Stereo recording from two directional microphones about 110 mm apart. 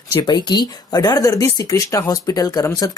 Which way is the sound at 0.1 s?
40° left (ahead or behind).